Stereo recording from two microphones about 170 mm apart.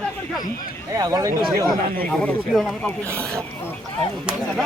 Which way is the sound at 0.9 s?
20° right (ahead or behind).